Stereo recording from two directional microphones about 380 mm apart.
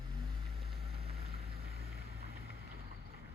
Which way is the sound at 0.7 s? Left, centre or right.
Right.